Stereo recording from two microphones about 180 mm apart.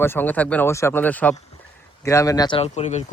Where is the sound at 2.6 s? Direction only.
40° left (ahead or behind).